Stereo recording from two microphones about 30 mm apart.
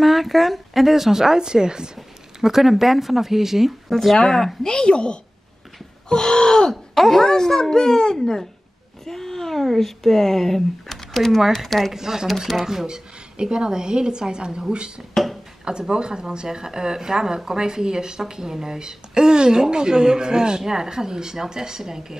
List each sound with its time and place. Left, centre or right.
0.0 s speech: centre; by 1.9 s right
2.4 s speech: centre
3.9 s speech: centre
4.6 s a woman's voice: left
6.7 s speech: centre
9.0 s speech: centre
11.9 s a woman's voice: centre
15.2 s a sound: centre
15.9 s a woman's voice: right